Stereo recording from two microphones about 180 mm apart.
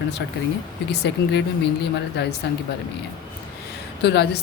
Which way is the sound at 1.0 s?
70° left (ahead or behind).